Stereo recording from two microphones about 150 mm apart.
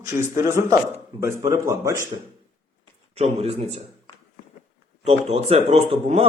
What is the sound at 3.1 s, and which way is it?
Speech, 45° right (ahead or behind).